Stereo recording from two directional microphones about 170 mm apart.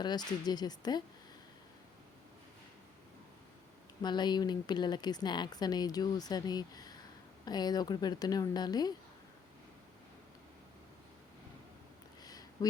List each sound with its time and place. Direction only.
0.0 s speech: 25° left (ahead or behind)
4.0 s speech: 25° left (ahead or behind)
12.2 s a sound: 20° left (ahead or behind)